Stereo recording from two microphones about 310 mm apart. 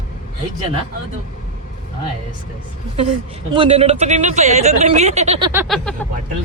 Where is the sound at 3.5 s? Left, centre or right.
Centre.